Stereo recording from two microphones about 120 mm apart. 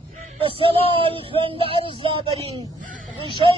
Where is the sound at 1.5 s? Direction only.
50° right (ahead or behind).